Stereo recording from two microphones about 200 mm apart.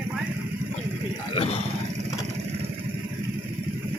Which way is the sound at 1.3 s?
30° left (ahead or behind).